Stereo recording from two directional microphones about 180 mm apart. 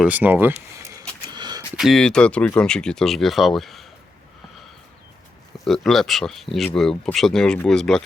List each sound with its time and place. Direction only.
0.0 s speech: 10° right (ahead or behind)
1.3 s a sound: 25° right (ahead or behind)
1.7 s speech: centre (ahead or behind)
5.6 s speech: centre (ahead or behind)